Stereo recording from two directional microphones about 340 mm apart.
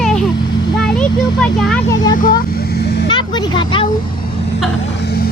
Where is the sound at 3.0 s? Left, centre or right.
Centre.